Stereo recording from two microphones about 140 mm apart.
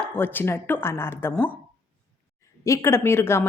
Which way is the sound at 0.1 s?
15° left (ahead or behind).